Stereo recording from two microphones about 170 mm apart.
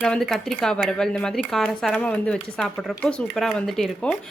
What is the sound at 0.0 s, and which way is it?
Speech, 5° left (ahead or behind).